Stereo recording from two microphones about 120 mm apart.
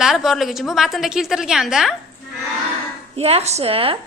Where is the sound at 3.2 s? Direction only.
60° right (ahead or behind).